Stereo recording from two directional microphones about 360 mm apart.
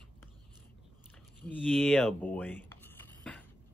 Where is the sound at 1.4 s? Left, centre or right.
Centre.